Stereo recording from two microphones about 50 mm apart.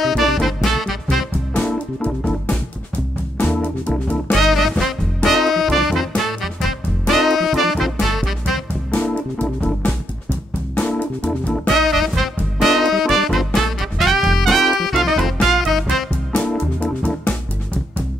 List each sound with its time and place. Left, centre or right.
0.0 s music: centre
2.0 s music: left
3.5 s music: left
4.3 s music: centre
8.9 s music: left
11.2 s music: centre
16.3 s organ: left